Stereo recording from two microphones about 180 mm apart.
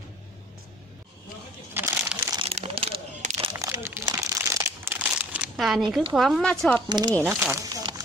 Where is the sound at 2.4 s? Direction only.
30° right (ahead or behind).